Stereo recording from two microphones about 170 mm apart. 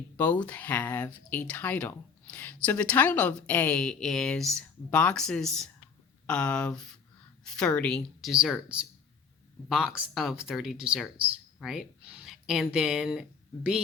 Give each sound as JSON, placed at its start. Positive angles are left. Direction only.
{"t": 0.2, "sound": "speech", "side_deg": 10}
{"t": 9.6, "sound": "speech", "side_deg": -5}